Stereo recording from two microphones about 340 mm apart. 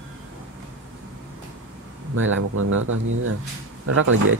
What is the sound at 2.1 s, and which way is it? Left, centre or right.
Speech, right.